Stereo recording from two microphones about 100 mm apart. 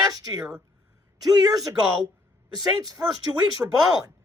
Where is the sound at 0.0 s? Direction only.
40° right (ahead or behind).